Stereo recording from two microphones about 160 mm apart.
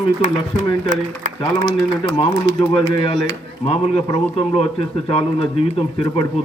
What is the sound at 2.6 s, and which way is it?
A man's voice, 35° left (ahead or behind).